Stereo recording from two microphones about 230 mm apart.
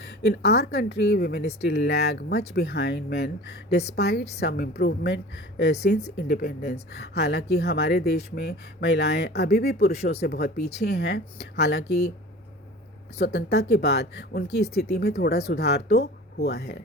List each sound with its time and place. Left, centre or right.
0.0 s speech: left
13.1 s speech: left